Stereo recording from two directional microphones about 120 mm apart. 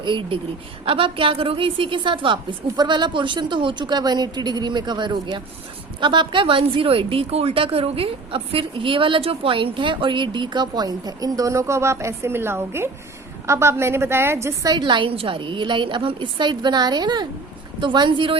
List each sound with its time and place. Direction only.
0.0 s a woman's voice: 45° right (ahead or behind)